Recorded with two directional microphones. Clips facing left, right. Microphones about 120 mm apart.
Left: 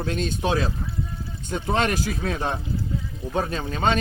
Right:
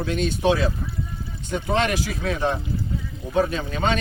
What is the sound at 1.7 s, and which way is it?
Speech, 40° left (ahead or behind).